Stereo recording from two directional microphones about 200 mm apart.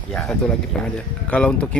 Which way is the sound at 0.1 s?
5° left (ahead or behind).